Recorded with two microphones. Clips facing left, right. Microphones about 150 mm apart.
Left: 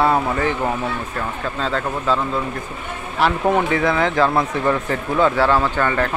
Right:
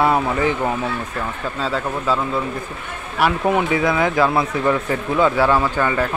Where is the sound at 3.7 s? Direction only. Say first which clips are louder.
Even; 10° right (ahead or behind).